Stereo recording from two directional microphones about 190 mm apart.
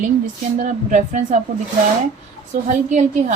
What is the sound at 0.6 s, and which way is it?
Speech, 40° right (ahead or behind).